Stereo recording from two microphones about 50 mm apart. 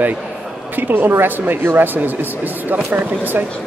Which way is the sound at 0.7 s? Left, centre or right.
Right.